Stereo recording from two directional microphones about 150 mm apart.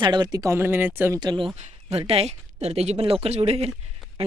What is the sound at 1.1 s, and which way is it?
Speech, 30° right (ahead or behind).